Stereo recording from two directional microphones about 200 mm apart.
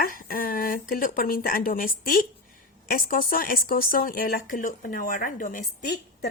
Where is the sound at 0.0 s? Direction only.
45° left (ahead or behind).